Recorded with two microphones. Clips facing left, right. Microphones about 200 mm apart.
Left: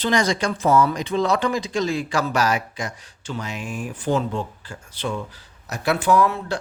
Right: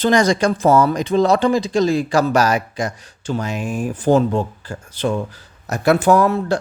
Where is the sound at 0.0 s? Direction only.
45° right (ahead or behind).